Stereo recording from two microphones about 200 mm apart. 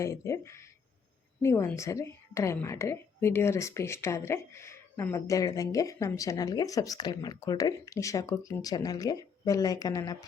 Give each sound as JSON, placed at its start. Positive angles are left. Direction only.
{"t": 0.0, "sound": "a woman's voice", "side_deg": 15}